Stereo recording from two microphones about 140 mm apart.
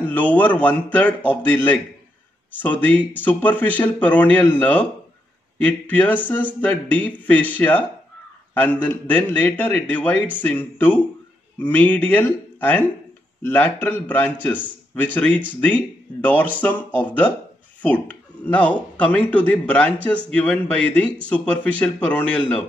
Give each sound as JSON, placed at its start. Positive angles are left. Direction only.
{"t": 0.0, "sound": "a man's voice", "side_deg": 10}
{"t": 3.2, "sound": "a man's voice", "side_deg": 10}
{"t": 18.4, "sound": "a man's voice", "side_deg": 10}